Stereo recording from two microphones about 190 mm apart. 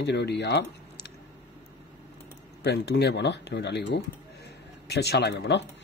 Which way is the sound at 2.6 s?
60° left (ahead or behind).